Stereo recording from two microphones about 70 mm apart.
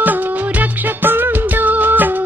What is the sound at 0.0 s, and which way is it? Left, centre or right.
Music, right.